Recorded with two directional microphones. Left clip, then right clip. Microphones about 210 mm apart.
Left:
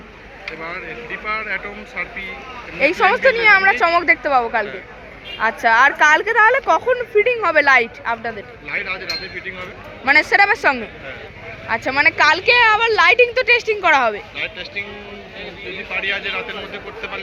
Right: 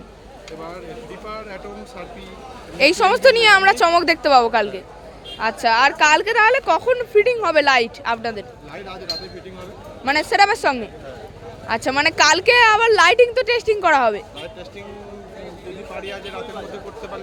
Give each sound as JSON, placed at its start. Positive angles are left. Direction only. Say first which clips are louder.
{"t": 2.7, "sound": "a woman's voice", "louder": "even", "side_deg": -25}
{"t": 5.4, "sound": "a woman's voice", "louder": "left 2 dB", "side_deg": -15}
{"t": 16.0, "sound": "a woman's voice", "louder": "left 11 dB", "side_deg": -10}